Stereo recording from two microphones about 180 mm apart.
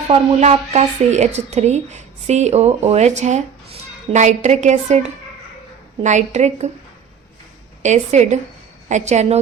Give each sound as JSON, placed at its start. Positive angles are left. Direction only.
{"t": 0.1, "sound": "a woman's voice", "side_deg": -35}
{"t": 7.8, "sound": "a woman's voice", "side_deg": -40}